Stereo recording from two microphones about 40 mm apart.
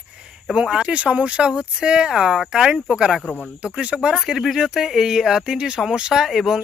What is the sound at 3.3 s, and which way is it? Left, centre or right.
Speech, right.